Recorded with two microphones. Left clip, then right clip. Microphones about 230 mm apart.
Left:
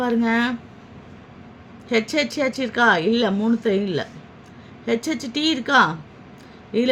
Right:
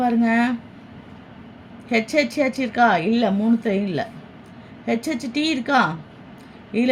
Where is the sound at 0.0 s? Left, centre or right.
Centre.